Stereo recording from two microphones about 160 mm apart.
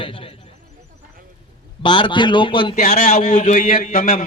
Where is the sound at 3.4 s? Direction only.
55° left (ahead or behind).